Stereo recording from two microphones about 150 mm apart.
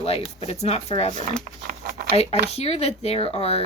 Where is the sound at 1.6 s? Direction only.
80° right.